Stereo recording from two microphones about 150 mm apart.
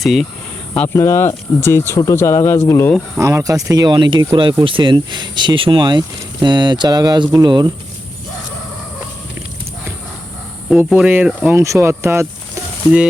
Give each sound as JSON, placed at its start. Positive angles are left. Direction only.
{"t": 0.0, "sound": "speech", "side_deg": 0}
{"t": 0.8, "sound": "speech", "side_deg": 15}
{"t": 3.2, "sound": "speech", "side_deg": -20}
{"t": 10.7, "sound": "speech", "side_deg": -5}
{"t": 11.4, "sound": "speech", "side_deg": -20}